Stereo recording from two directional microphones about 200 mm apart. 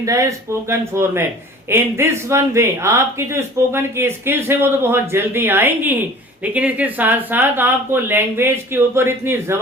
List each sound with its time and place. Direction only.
0.0 s speech: 15° right (ahead or behind)